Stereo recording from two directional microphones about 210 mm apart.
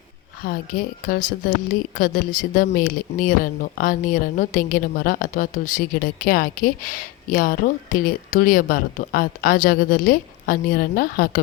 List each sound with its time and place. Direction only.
0.4 s speech: 45° left (ahead or behind)